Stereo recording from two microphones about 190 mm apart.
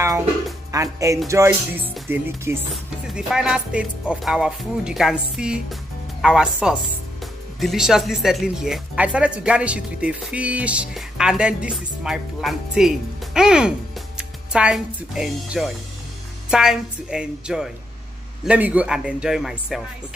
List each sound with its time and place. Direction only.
0.9 s music: 15° right (ahead or behind)
2.7 s speech: 5° right (ahead or behind)